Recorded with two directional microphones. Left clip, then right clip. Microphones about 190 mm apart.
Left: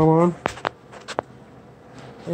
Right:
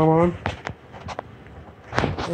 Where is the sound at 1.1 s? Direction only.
40° left (ahead or behind).